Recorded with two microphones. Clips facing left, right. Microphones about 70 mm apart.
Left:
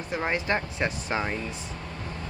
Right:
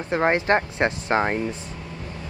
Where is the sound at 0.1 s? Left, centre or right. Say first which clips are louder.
Right 8 dB; right.